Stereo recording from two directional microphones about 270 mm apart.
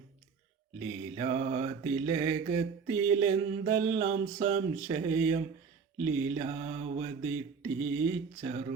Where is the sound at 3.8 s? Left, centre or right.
Right.